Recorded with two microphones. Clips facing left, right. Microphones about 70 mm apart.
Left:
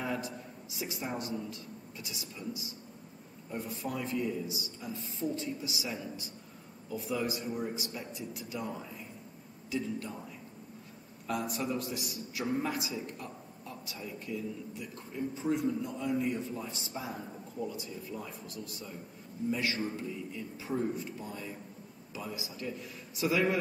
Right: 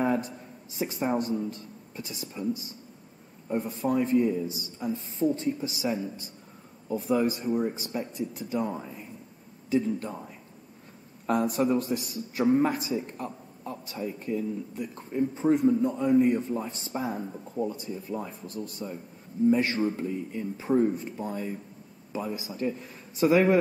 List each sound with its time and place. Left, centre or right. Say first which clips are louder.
0.0 s a sound: right 9 dB; right
0.7 s a man's voice: right 10 dB; right
11.2 s a man's voice: right 9 dB; right